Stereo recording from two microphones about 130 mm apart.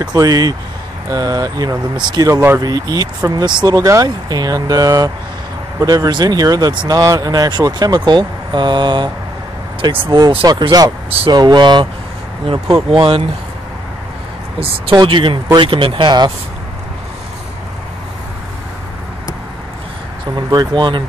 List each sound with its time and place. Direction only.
0.0 s speech: 30° right (ahead or behind)
10.1 s speech: 35° right (ahead or behind)
14.6 s speech: 40° right (ahead or behind)
20.5 s speech: 35° right (ahead or behind)